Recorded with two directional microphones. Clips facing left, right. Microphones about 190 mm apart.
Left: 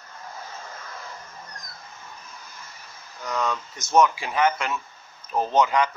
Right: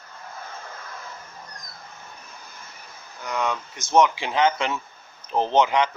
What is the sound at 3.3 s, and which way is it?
Speech, 15° right (ahead or behind).